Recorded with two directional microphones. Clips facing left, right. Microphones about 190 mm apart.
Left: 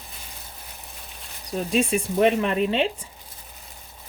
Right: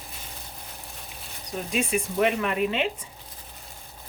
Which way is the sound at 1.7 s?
35° left (ahead or behind).